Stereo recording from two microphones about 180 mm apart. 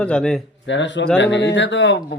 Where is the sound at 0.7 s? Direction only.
85° left.